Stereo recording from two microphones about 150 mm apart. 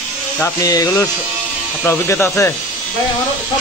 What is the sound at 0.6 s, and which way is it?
Speech, 20° left (ahead or behind).